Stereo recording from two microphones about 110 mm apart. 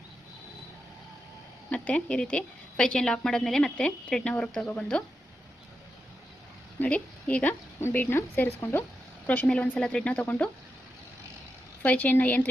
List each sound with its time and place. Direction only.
1.7 s a woman's voice: 10° left (ahead or behind)
6.7 s a woman's voice: 10° left (ahead or behind)
11.8 s a woman's voice: 15° left (ahead or behind)